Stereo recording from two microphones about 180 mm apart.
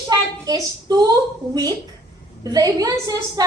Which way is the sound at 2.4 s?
20° right (ahead or behind).